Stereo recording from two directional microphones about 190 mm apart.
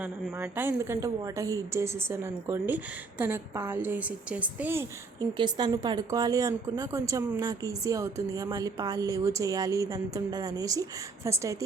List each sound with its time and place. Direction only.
0.0 s a woman's voice: 10° right (ahead or behind)
5.4 s a woman's voice: 20° right (ahead or behind)